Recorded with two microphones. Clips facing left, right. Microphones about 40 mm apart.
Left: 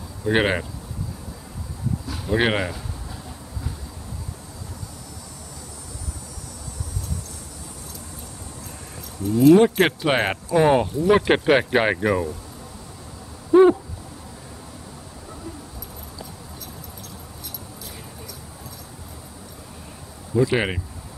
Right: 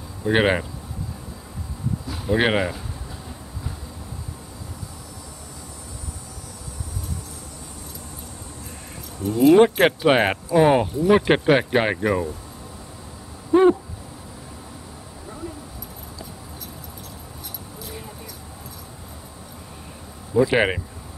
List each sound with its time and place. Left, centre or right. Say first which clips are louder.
0.2 s speech: right 1 dB; centre
2.0 s speech: right 1 dB; centre
9.2 s speech: even; centre
9.8 s speech: right 3 dB; centre
20.3 s speech: right 2 dB; centre